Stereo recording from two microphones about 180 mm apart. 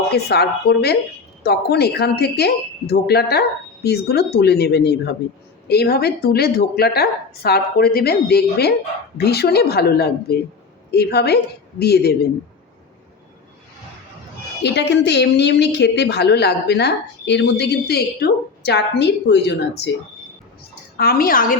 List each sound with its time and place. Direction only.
0.3 s a woman's voice: 65° left (ahead or behind)
14.6 s a woman's voice: 70° left (ahead or behind)
20.9 s a woman's voice: 55° left (ahead or behind)